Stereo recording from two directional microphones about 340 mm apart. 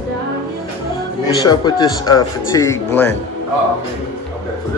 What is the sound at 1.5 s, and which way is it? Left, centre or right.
Speech, centre.